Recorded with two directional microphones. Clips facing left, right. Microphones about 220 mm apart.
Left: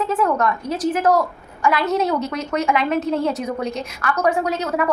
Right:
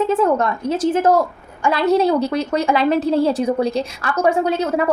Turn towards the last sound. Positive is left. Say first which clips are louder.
# right 3 dB
turn(degrees=-30)  # may be behind; listen again after turning